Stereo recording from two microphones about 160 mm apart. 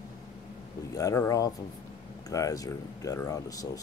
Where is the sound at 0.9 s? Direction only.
20° left (ahead or behind).